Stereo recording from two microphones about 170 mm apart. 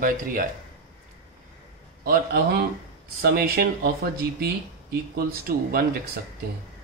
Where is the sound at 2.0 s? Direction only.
60° right (ahead or behind).